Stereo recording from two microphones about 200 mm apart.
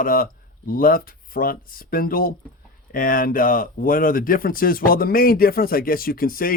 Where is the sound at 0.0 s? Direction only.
45° left (ahead or behind).